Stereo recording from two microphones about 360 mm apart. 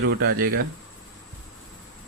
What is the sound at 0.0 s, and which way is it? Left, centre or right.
Speech, right.